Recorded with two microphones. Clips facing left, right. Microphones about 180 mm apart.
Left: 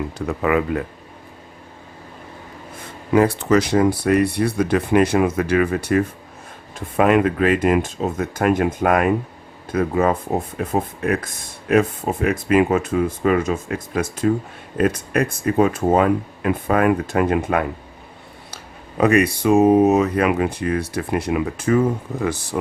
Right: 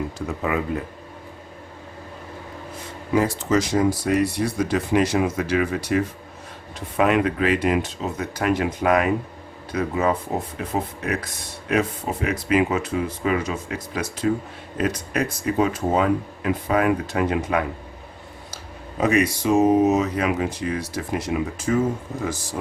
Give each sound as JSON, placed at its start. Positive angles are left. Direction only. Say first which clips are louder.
{"t": 0.3, "sound": "speech", "louder": "left 6 dB", "side_deg": 65}
{"t": 3.1, "sound": "speech", "louder": "left 5 dB", "side_deg": 60}